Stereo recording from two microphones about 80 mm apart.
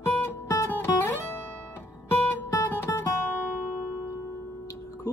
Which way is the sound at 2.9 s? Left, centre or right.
Left.